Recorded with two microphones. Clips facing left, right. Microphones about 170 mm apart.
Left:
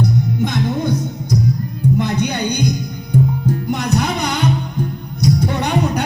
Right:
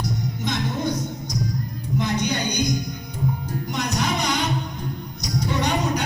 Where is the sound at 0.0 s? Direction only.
60° left (ahead or behind).